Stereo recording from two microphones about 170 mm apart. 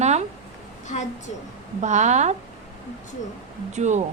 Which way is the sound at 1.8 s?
45° right (ahead or behind).